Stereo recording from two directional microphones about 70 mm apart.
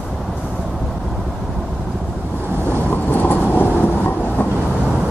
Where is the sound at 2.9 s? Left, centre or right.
Left.